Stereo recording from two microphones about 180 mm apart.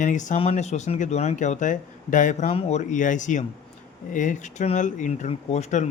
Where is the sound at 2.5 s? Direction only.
35° left (ahead or behind).